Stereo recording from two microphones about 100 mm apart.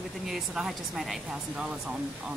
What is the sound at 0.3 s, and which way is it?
A woman's voice, 5° right (ahead or behind).